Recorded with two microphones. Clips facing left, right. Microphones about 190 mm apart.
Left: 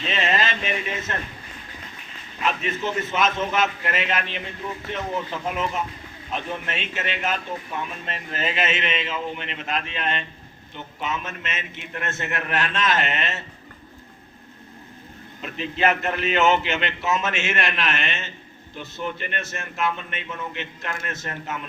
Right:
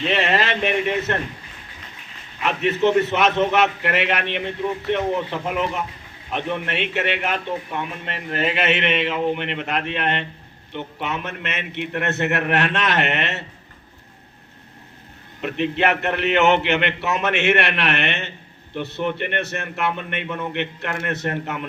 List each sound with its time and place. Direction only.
0.0 s speech: 65° right (ahead or behind)
2.4 s a man's voice: 65° right (ahead or behind)
15.4 s a man's voice: 65° right (ahead or behind)